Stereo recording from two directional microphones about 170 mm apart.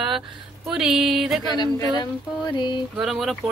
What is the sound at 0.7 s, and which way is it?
Speech, 5° right (ahead or behind).